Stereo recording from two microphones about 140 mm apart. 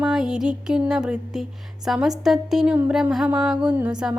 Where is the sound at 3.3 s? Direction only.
5° right (ahead or behind).